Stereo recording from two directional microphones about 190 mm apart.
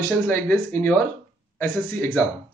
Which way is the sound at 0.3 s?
10° left (ahead or behind).